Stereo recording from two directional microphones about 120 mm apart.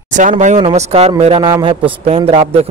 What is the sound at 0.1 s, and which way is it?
Speech, 90° right.